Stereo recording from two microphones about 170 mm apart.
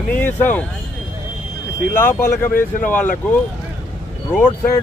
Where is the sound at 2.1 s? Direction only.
50° left (ahead or behind).